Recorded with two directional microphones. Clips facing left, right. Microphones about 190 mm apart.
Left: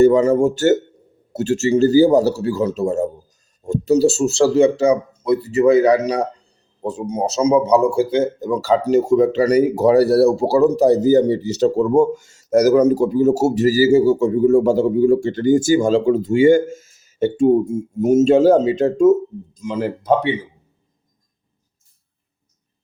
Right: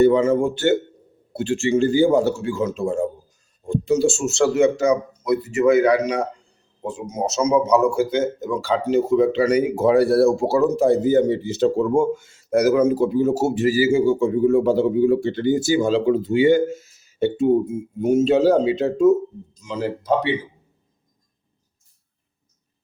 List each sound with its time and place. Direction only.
0.0 s speech: 40° left (ahead or behind)